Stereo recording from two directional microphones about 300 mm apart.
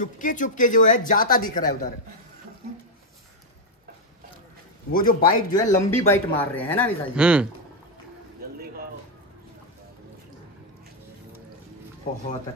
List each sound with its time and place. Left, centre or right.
0.0 s speech: left
4.9 s speech: left
5.5 s speech: centre